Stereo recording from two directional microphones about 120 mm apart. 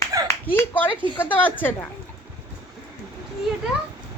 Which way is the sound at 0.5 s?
15° left (ahead or behind).